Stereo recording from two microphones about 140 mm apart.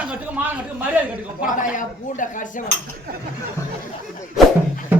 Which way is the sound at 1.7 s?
65° left (ahead or behind).